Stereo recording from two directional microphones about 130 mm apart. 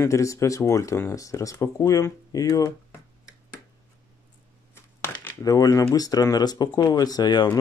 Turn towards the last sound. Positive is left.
turn(degrees=30)  # may be behind; listen again after turning